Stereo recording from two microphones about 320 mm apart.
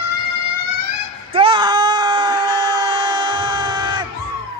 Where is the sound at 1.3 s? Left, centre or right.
Centre.